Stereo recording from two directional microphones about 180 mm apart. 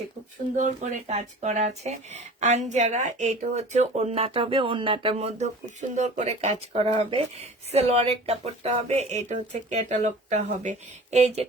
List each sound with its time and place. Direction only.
0.5 s speech: 40° right (ahead or behind)